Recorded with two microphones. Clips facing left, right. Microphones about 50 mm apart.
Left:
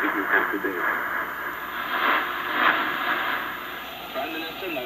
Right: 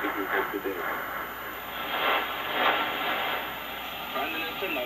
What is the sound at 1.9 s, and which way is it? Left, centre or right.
Radio, centre.